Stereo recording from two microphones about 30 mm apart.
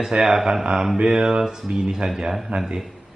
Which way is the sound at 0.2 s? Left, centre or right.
Centre.